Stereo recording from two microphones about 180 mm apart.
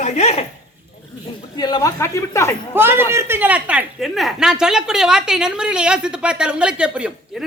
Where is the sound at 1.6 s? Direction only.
20° left (ahead or behind).